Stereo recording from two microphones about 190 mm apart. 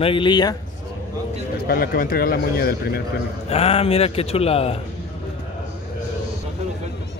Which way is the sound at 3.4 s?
30° left (ahead or behind).